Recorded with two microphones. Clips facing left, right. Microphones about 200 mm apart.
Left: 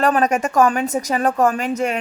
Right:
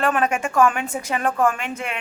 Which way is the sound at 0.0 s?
40° left (ahead or behind).